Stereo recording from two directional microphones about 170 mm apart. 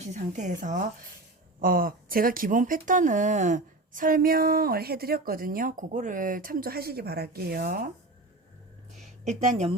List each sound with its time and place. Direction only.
0.0 s speech: 45° right (ahead or behind)
9.2 s speech: 40° right (ahead or behind)